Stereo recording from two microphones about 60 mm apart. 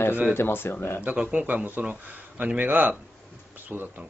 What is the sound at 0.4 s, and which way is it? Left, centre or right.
Speech, left.